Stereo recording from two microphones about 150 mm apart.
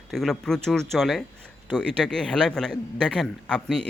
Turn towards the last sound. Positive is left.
turn(degrees=5)  # may be behind; listen again after turning